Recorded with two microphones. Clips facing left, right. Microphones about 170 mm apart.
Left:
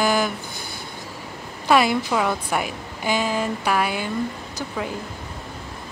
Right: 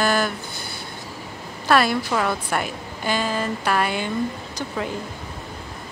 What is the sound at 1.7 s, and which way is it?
A woman's voice, 15° left (ahead or behind).